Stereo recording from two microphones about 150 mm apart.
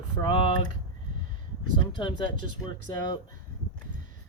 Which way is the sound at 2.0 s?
30° left (ahead or behind).